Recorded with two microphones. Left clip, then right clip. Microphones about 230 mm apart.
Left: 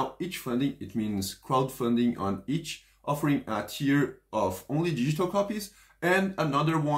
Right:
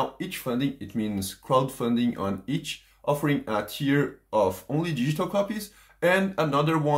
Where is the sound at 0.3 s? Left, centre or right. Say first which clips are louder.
Right 2 dB; right.